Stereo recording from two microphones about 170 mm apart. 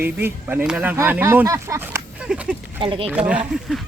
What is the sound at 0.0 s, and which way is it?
Speech, 15° right (ahead or behind).